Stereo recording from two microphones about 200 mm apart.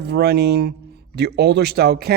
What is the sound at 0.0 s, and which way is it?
Speech, 55° right (ahead or behind).